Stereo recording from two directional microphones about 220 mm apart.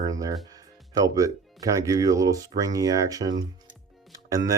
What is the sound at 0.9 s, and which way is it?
Speech, 15° right (ahead or behind).